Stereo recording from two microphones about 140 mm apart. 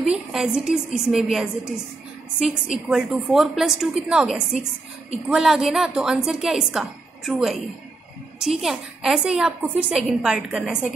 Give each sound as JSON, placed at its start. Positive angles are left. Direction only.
{"t": 0.0, "sound": "a woman's voice", "side_deg": -5}